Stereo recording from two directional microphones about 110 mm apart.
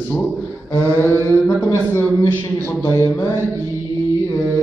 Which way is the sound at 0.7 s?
25° left (ahead or behind).